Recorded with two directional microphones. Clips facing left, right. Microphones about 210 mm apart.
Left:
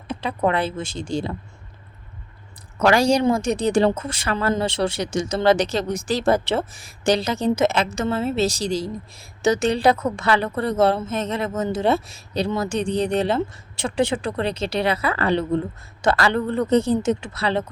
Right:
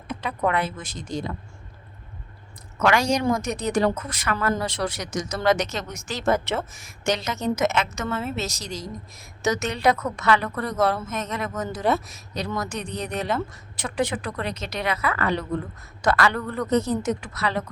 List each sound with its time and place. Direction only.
0.1 s a woman's voice: 30° left (ahead or behind)
2.7 s a woman's voice: 35° left (ahead or behind)